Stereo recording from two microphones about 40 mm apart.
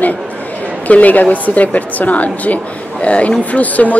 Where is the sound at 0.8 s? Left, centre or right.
Left.